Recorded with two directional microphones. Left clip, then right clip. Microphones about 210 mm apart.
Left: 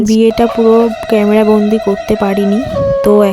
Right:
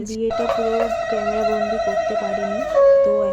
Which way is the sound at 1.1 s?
55° left (ahead or behind).